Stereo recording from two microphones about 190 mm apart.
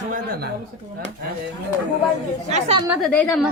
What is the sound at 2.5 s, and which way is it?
Speech, 35° right (ahead or behind).